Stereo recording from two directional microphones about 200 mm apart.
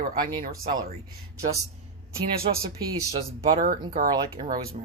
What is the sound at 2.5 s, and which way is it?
Speech, 30° right (ahead or behind).